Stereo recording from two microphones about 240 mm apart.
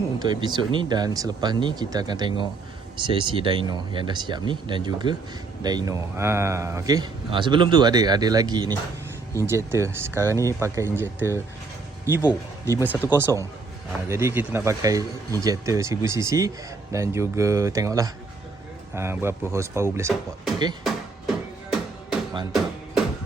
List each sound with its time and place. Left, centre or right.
0.2 s a man's voice: centre
20.8 s music: centre